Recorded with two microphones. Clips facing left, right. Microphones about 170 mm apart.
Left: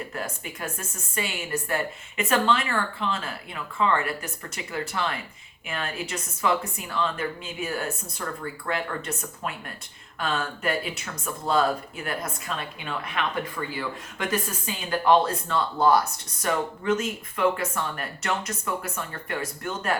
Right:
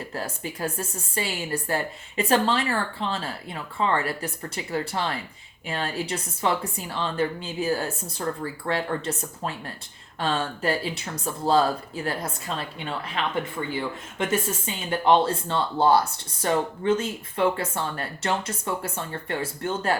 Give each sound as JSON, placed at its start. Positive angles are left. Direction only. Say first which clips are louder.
{"t": 0.1, "sound": "a woman's voice", "louder": "right 2 dB", "side_deg": -30}